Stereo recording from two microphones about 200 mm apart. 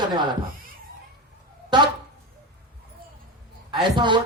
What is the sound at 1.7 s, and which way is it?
Speech, 25° right (ahead or behind).